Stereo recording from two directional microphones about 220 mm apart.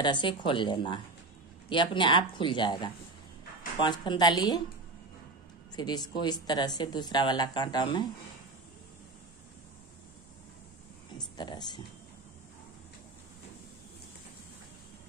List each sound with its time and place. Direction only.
0.0 s a woman's voice: 20° left (ahead or behind)
5.8 s a woman's voice: 20° left (ahead or behind)
11.1 s speech: 20° left (ahead or behind)